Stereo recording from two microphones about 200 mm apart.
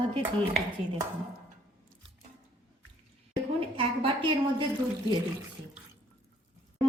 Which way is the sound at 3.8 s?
25° right (ahead or behind).